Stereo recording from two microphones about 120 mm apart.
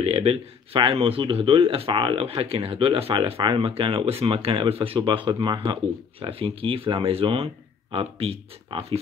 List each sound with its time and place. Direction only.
0.0 s speech: 55° right (ahead or behind)